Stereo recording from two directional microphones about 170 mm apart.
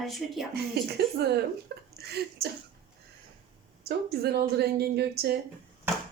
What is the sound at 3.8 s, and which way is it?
A woman's voice, 70° right (ahead or behind).